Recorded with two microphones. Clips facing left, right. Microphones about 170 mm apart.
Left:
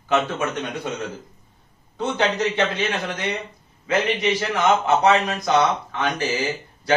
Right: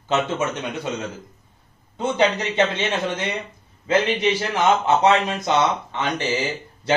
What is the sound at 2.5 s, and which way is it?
Speech, 25° right (ahead or behind).